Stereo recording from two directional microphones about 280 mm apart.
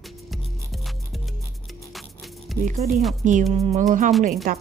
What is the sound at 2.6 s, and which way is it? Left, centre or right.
Speech, right.